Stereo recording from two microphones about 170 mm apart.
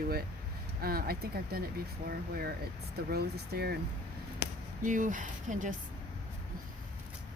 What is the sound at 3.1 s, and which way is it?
Speech, 70° right (ahead or behind).